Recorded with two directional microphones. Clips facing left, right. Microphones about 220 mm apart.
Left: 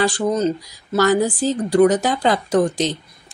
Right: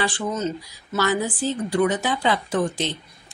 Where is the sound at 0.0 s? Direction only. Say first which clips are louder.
Left 7 dB; 40° left (ahead or behind).